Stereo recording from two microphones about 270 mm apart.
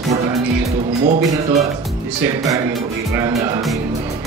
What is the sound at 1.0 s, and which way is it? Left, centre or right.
Speech, right.